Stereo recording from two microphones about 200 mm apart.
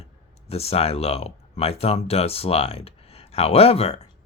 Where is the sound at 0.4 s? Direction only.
30° left (ahead or behind).